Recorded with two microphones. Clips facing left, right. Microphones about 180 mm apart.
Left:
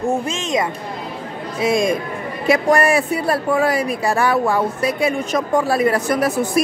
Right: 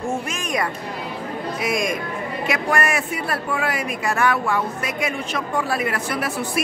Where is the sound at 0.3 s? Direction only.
25° left (ahead or behind).